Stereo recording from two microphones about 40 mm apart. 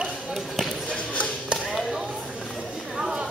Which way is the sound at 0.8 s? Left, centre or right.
Left.